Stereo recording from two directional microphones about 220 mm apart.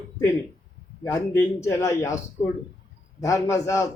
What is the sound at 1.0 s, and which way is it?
A man's voice, 15° left (ahead or behind).